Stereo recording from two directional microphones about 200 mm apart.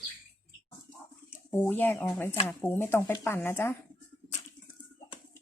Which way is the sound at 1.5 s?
10° left (ahead or behind).